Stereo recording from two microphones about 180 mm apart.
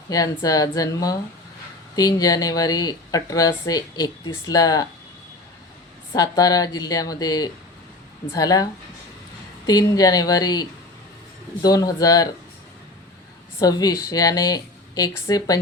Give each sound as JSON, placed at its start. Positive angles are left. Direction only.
{"t": 0.1, "sound": "speech", "side_deg": 20}
{"t": 6.1, "sound": "speech", "side_deg": 20}
{"t": 13.6, "sound": "speech", "side_deg": 20}